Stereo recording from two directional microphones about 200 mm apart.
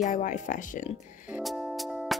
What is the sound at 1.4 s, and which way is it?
Music, centre (ahead or behind).